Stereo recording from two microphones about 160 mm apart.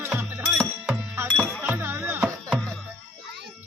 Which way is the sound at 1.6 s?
10° right (ahead or behind).